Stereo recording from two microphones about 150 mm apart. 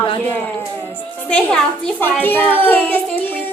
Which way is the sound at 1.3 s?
10° left (ahead or behind).